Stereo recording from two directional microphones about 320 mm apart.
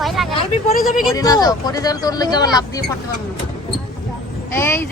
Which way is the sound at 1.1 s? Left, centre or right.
Centre.